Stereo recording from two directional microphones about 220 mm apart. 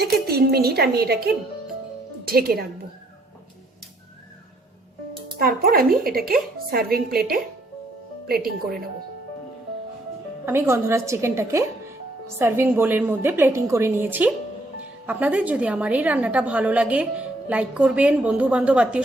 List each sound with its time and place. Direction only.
0.0 s a woman's voice: 45° right (ahead or behind)
5.4 s a woman's voice: 45° right (ahead or behind)
10.4 s a woman's voice: 10° right (ahead or behind)